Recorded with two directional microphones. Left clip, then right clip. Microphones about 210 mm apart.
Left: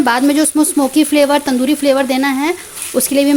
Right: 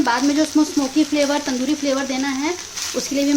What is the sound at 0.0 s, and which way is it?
Speech, 45° left (ahead or behind).